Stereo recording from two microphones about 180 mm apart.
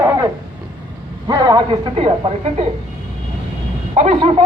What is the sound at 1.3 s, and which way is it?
A man's voice, 20° right (ahead or behind).